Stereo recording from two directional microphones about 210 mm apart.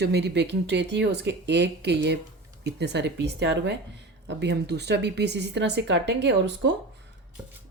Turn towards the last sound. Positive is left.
turn(degrees=-55)  # may be behind; listen again after turning